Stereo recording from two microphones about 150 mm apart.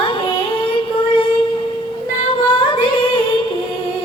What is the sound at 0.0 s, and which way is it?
Child singing, 35° left (ahead or behind).